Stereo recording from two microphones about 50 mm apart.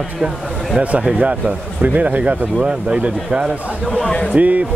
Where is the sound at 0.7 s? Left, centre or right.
Right.